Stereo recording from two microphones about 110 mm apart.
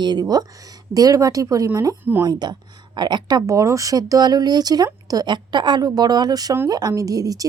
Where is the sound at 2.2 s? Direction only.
40° right (ahead or behind).